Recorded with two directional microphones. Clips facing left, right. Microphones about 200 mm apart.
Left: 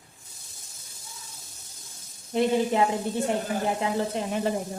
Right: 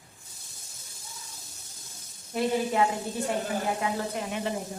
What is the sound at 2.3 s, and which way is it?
Speech, 25° left (ahead or behind).